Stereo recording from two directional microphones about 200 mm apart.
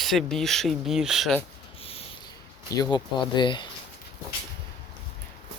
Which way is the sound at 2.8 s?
20° left (ahead or behind).